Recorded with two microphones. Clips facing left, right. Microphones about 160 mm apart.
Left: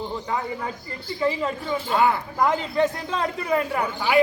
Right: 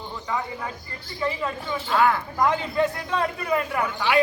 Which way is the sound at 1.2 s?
25° left (ahead or behind).